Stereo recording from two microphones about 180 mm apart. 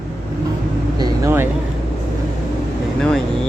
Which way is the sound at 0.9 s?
25° right (ahead or behind).